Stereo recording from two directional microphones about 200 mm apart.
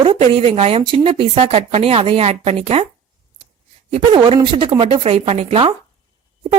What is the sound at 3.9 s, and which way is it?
Speech, 25° right (ahead or behind).